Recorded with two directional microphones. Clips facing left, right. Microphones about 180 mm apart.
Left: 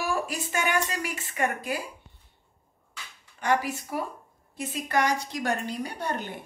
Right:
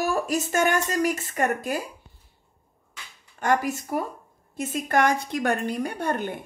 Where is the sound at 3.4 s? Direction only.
50° right (ahead or behind).